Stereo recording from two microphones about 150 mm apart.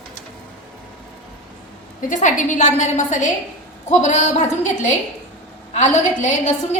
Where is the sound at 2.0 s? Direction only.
60° left (ahead or behind).